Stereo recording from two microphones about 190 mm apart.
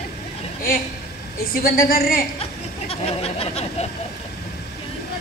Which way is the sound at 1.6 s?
50° left (ahead or behind).